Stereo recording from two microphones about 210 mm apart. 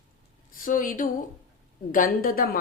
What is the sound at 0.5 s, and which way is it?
A woman's voice, 40° left (ahead or behind).